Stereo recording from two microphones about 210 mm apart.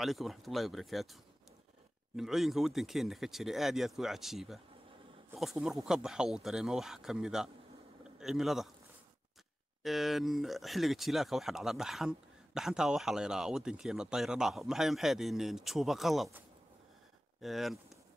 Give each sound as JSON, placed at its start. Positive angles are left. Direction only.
{"t": 0.0, "sound": "speech", "side_deg": 0}
{"t": 9.8, "sound": "speech", "side_deg": 0}